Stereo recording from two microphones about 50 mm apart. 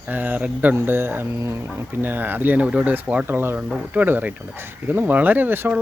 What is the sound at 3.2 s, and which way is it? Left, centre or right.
Speech, right.